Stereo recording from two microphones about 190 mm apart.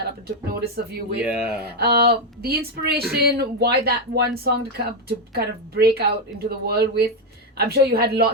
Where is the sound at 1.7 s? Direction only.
55° right (ahead or behind).